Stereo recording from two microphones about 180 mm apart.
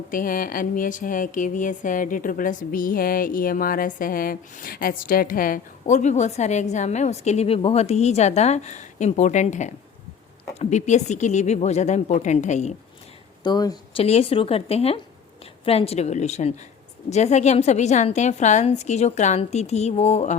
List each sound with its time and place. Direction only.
0.1 s a woman's voice: 50° left (ahead or behind)
13.4 s speech: 20° left (ahead or behind)
14.0 s a woman's voice: 35° left (ahead or behind)